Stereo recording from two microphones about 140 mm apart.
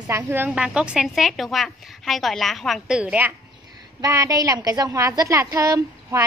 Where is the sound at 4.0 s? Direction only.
25° right (ahead or behind).